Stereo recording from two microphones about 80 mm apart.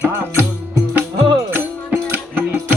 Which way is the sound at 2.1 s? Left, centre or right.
Right.